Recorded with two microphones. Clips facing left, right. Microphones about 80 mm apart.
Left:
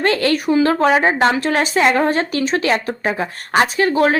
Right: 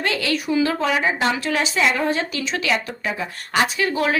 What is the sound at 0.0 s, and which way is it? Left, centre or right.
A woman's voice, left.